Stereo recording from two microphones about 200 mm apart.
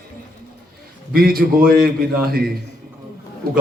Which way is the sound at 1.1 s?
45° right (ahead or behind).